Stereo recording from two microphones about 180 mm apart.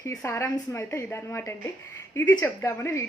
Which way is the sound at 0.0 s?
15° left (ahead or behind).